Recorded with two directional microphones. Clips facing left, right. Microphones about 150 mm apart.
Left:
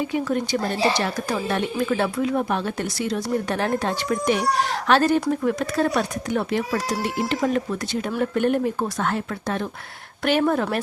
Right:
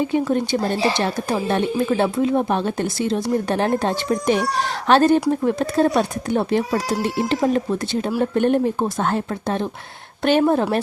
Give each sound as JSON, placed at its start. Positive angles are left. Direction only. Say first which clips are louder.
{"t": 0.0, "sound": "speech", "louder": "right 4 dB", "side_deg": -30}